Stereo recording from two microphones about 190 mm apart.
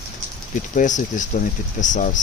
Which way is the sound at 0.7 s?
40° left (ahead or behind).